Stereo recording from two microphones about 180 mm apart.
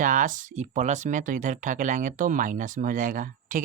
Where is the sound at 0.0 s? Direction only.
45° right (ahead or behind).